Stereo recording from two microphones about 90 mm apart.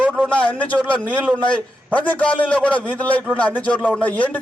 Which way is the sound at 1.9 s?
15° left (ahead or behind).